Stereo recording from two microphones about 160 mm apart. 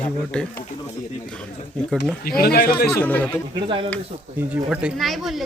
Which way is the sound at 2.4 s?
70° left (ahead or behind).